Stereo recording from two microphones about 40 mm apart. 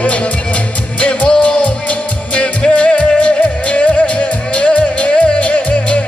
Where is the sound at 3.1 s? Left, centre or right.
Left.